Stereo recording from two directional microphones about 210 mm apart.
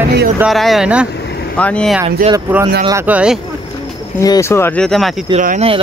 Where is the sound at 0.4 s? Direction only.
Centre (ahead or behind).